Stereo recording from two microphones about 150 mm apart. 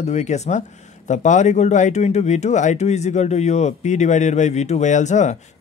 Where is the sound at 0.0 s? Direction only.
50° left (ahead or behind).